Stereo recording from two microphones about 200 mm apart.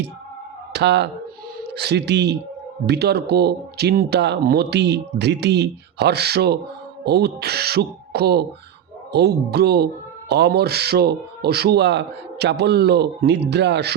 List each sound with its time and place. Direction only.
0.7 s speech: 55° right (ahead or behind)